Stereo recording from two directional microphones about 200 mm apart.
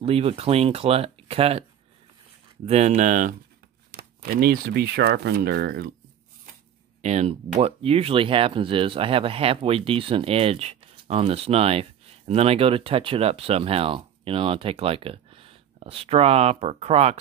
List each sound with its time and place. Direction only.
0.0 s speech: 30° right (ahead or behind)
2.6 s speech: 35° right (ahead or behind); by 5.9 s 55° right (ahead or behind)
7.0 s speech: 35° right (ahead or behind)